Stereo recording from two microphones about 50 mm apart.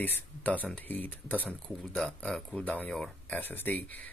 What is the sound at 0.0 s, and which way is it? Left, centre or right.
Speech, left.